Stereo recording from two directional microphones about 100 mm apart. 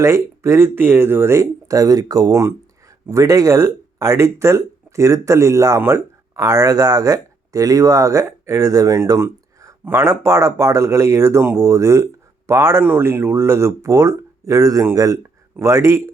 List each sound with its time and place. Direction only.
0.0 s speech: 30° right (ahead or behind)